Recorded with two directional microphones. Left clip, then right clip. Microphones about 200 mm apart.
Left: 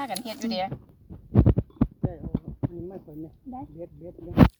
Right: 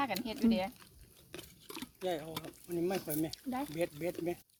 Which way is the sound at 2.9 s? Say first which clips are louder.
Right 4 dB; 70° right (ahead or behind).